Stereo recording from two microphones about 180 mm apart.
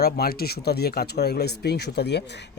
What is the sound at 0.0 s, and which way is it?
Speech, 60° left (ahead or behind).